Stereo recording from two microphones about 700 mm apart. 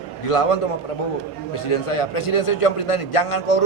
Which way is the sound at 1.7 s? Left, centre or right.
Left.